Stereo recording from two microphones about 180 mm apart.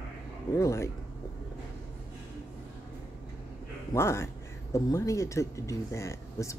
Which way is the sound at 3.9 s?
15° left (ahead or behind).